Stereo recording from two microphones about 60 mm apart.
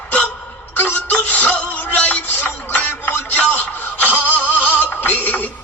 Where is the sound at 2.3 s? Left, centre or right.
Left.